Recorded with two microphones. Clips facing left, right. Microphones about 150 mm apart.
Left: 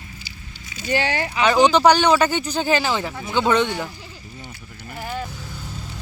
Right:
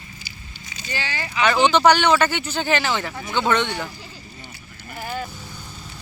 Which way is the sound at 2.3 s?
35° left (ahead or behind).